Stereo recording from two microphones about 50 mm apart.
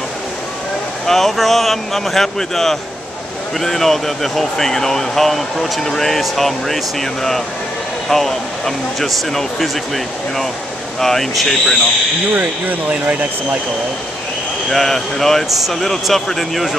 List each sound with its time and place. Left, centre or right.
1.0 s speech: centre
12.4 s speech: right
14.7 s speech: centre